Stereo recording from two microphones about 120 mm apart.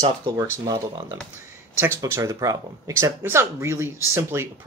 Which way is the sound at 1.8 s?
20° right (ahead or behind).